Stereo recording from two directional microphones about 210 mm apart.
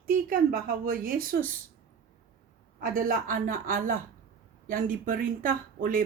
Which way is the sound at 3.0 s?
40° right (ahead or behind).